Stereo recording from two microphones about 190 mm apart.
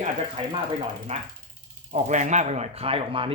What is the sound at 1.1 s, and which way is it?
Speech, 35° right (ahead or behind).